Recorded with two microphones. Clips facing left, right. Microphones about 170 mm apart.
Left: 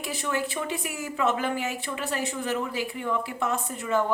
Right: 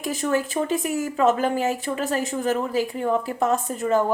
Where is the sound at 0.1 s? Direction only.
40° right (ahead or behind).